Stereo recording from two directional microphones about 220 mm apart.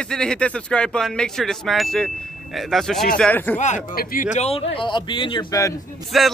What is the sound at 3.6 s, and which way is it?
A man's voice, 35° left (ahead or behind).